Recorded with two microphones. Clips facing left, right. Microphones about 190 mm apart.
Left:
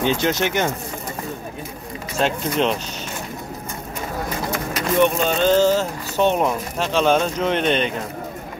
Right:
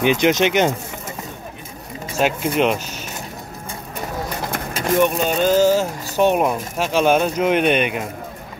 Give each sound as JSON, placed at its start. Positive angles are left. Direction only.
{"t": 0.0, "sound": "speech", "side_deg": -15}
{"t": 2.1, "sound": "speech", "side_deg": -10}
{"t": 5.0, "sound": "speech", "side_deg": -10}